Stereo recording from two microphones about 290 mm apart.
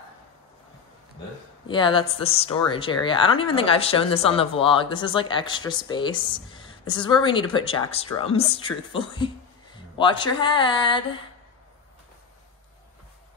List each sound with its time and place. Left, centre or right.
1.7 s speech: centre